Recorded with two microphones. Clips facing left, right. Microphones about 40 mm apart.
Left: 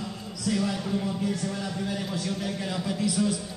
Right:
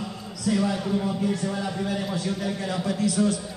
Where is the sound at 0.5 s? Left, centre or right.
Centre.